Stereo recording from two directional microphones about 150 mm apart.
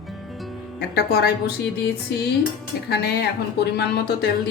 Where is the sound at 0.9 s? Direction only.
90° left.